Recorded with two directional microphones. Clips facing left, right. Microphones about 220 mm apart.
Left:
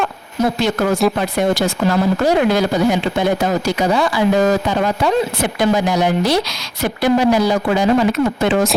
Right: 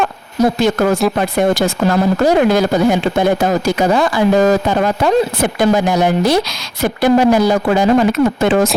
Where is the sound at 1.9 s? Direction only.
45° right (ahead or behind).